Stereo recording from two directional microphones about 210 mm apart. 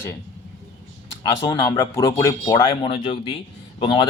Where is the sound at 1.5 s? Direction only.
20° left (ahead or behind).